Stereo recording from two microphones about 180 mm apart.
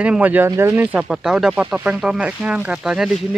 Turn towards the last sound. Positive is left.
turn(degrees=0)  # may be behind; listen again after turning